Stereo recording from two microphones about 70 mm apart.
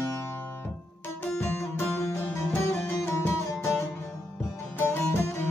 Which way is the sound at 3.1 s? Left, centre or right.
Left.